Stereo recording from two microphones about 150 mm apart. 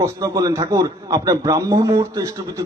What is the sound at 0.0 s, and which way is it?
A man's voice, 25° right (ahead or behind).